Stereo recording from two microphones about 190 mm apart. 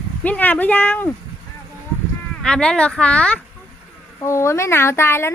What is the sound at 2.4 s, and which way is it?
Speech, 5° left (ahead or behind).